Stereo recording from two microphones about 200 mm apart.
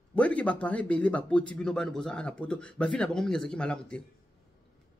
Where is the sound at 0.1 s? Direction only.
5° left (ahead or behind).